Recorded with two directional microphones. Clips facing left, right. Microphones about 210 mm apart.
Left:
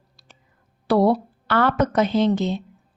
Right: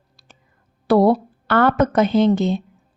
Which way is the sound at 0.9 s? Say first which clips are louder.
Right 3 dB; 50° right (ahead or behind).